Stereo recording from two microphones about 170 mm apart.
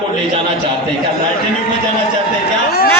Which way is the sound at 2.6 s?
65° left (ahead or behind).